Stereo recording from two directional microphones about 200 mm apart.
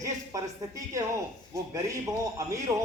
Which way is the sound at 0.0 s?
15° right (ahead or behind).